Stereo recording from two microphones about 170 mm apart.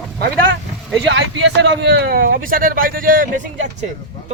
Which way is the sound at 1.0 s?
90° right.